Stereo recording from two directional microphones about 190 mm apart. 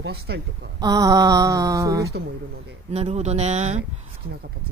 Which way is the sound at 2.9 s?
35° right (ahead or behind).